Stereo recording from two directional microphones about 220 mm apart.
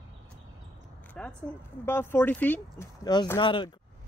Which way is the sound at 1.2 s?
5° left (ahead or behind).